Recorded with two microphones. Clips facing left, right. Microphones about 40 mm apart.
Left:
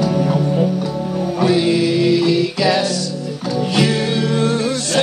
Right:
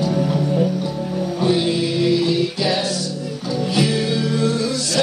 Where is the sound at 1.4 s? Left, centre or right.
Left.